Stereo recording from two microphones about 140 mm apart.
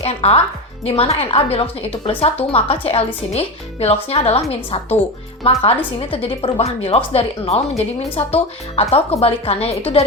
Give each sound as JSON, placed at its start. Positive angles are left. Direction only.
{"t": 0.0, "sound": "speech", "side_deg": 45}